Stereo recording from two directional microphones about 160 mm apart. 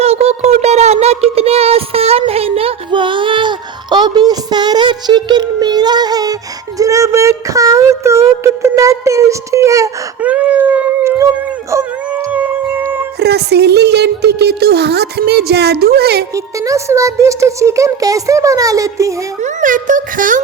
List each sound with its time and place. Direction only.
0.0 s a sound: 40° right (ahead or behind); by 6.3 s 25° right (ahead or behind)
6.7 s speech: 20° right (ahead or behind)
10.2 s speech: 10° right (ahead or behind)
12.3 s music: 10° right (ahead or behind)
13.1 s music: 90° right
16.3 s speech: 20° right (ahead or behind)
19.4 s a child's voice: 50° right (ahead or behind)